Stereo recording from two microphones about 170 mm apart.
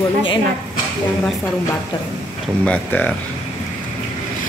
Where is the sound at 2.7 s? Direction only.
10° left (ahead or behind).